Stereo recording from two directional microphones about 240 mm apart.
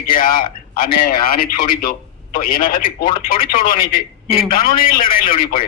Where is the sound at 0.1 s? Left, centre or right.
Left.